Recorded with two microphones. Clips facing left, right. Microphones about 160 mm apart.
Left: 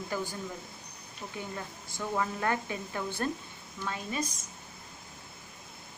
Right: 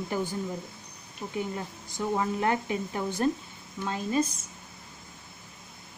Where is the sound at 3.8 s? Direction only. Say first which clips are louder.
Right 7 dB; 30° right (ahead or behind).